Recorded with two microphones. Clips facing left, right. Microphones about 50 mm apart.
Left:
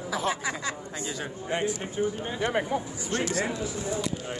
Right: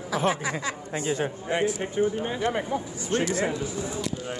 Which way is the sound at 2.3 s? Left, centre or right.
Centre.